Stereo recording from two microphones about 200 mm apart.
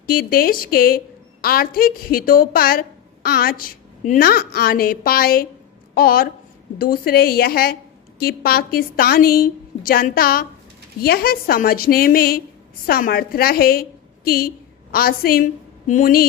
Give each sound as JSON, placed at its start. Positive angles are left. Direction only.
{"t": 0.1, "sound": "a woman's voice", "side_deg": 45}